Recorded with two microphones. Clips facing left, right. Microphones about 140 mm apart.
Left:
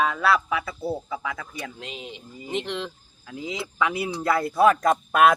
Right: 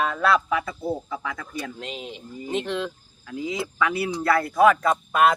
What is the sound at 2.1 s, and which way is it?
Speech, 20° left (ahead or behind).